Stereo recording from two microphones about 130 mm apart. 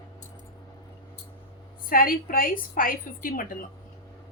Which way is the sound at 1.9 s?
90° left.